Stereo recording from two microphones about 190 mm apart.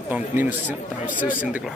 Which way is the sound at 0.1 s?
10° right (ahead or behind).